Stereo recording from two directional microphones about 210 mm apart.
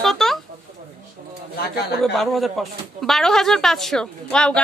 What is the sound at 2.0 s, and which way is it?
Speech, centre (ahead or behind).